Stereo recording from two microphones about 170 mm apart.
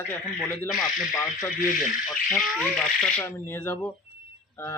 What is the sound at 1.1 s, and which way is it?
Speech, 20° left (ahead or behind).